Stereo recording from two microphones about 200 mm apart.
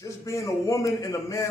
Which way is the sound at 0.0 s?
15° left (ahead or behind).